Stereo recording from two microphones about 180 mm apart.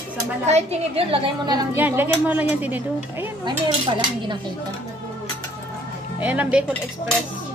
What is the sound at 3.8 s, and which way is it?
Speech, 25° right (ahead or behind).